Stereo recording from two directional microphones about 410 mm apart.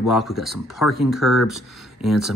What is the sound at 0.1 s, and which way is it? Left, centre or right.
Speech, centre.